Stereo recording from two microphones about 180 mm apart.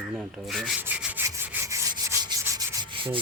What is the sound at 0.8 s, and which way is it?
Rub, 10° right (ahead or behind).